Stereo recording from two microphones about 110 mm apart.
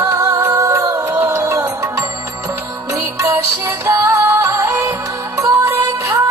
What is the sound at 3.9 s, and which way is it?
Music, 30° right (ahead or behind).